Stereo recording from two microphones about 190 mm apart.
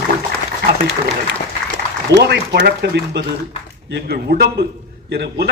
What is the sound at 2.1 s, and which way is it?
A man's voice, 60° right (ahead or behind).